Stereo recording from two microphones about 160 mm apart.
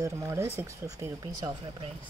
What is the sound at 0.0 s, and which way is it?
Speech, 20° right (ahead or behind).